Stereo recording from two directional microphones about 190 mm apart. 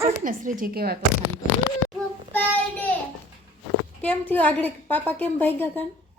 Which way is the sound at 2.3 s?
10° left (ahead or behind).